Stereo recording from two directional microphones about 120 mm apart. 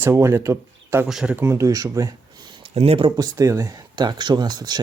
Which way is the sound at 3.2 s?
25° right (ahead or behind).